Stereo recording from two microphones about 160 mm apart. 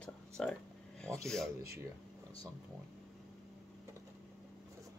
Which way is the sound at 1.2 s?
5° left (ahead or behind).